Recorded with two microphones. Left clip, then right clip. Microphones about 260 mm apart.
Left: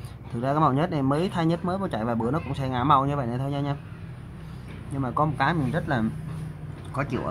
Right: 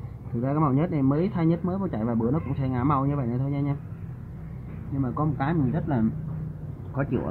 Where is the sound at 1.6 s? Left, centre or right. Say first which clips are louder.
Left 2 dB; left.